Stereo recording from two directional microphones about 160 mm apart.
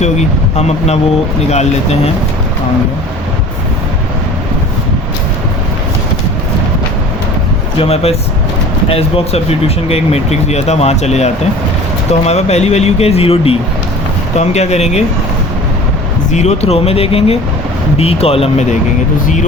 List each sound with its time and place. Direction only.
0.0 s speech: 45° left (ahead or behind)
7.8 s speech: 40° left (ahead or behind)
16.3 s speech: 45° left (ahead or behind)